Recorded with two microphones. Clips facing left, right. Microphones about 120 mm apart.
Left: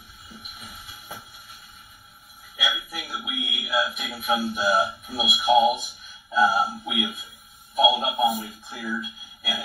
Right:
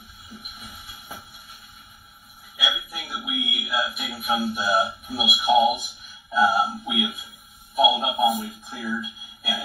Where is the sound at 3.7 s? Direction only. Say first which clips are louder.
Left 4 dB; 5° right (ahead or behind).